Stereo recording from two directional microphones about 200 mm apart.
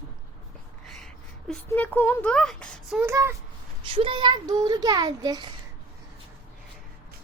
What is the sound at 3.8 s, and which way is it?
A child's voice, 25° right (ahead or behind).